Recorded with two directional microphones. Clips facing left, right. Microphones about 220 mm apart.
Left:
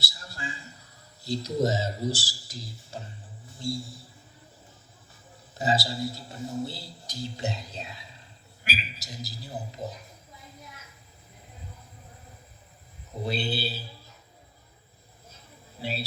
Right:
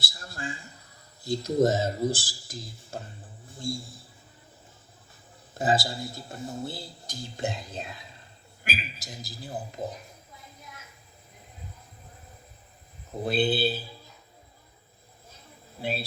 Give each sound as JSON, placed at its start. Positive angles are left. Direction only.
{"t": 0.0, "sound": "a sound", "side_deg": -50}
{"t": 1.2, "sound": "speech", "side_deg": -50}
{"t": 5.5, "sound": "speech", "side_deg": -50}
{"t": 13.2, "sound": "speech", "side_deg": -50}
{"t": 15.8, "sound": "speech", "side_deg": -50}